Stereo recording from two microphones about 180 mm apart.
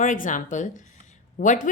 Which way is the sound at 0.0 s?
45° left (ahead or behind).